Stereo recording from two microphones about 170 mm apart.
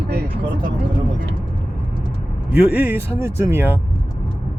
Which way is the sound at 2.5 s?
10° right (ahead or behind).